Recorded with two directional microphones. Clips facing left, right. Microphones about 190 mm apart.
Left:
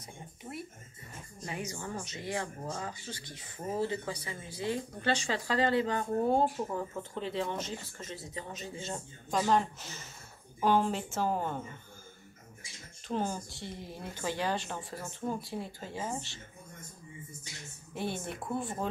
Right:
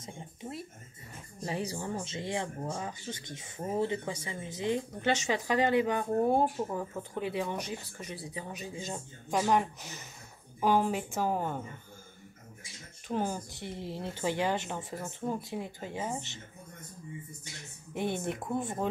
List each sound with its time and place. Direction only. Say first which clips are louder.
0.0 s a sound: right 4 dB; 25° right (ahead or behind)
1.4 s speech: right 4 dB; 35° right (ahead or behind); by 11.6 s 10° right (ahead or behind)
13.1 s speech: right 1 dB; 15° right (ahead or behind)
17.9 s speech: right 4 dB; 20° right (ahead or behind)